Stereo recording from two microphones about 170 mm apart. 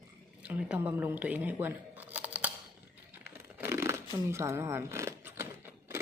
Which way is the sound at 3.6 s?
15° right (ahead or behind).